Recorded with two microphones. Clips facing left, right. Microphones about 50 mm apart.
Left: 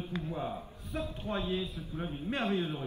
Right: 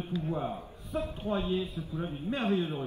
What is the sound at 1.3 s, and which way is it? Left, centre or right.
Speech, left.